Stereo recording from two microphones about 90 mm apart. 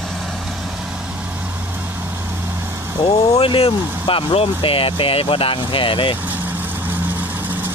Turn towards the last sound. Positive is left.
turn(degrees=70)  # may be behind; listen again after turning